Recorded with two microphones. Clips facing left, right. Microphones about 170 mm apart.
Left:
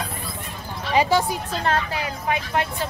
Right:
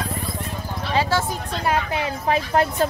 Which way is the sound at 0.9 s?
15° left (ahead or behind).